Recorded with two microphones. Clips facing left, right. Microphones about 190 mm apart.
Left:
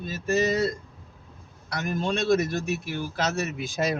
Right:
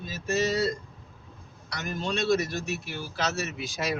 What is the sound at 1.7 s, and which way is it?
A man's voice, 55° left (ahead or behind).